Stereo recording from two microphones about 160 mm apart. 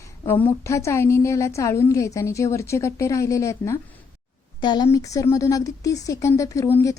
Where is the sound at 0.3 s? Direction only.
10° left (ahead or behind).